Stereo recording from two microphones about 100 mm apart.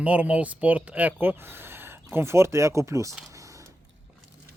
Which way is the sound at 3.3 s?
35° right (ahead or behind).